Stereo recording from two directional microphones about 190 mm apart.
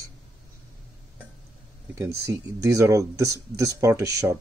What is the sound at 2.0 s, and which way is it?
Speech, 15° right (ahead or behind).